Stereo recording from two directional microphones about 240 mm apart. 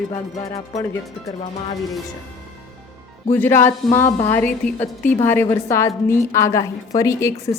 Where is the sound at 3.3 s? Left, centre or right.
Centre.